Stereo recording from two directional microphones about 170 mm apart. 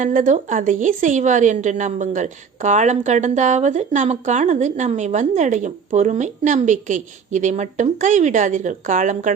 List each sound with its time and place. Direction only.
0.0 s a woman's voice: 45° right (ahead or behind)